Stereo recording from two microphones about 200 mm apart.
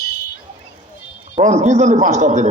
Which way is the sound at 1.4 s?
35° right (ahead or behind).